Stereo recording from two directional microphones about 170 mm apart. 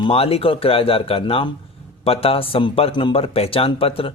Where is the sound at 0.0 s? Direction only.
35° left (ahead or behind).